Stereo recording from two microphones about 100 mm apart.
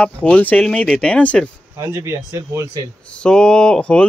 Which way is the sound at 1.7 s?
25° right (ahead or behind).